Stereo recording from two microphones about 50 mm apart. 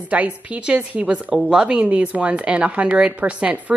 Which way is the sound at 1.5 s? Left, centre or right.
Centre.